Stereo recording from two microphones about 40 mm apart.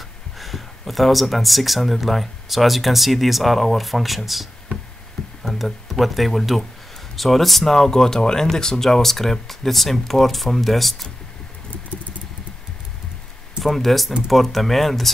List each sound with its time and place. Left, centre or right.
0.4 s speech: centre
13.6 s speech: centre